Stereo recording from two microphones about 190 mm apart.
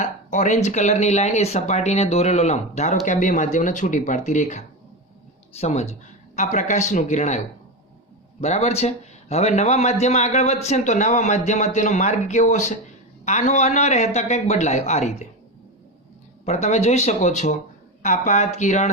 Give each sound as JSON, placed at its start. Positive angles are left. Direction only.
{"t": 0.0, "sound": "speech", "side_deg": 40}
{"t": 16.5, "sound": "speech", "side_deg": 35}